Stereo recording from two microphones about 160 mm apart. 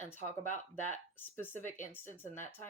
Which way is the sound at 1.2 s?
15° left (ahead or behind).